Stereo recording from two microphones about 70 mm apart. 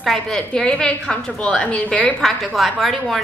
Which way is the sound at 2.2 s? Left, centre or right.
Centre.